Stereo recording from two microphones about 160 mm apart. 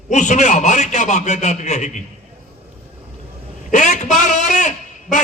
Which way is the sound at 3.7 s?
50° left (ahead or behind).